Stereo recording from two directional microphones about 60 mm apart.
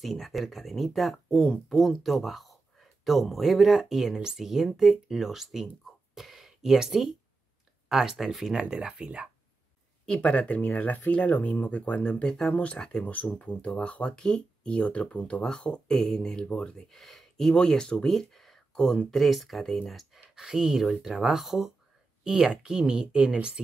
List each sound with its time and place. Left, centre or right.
0.0 s speech: centre
8.5 s speech: centre
10.0 s speech: centre
15.9 s speech: centre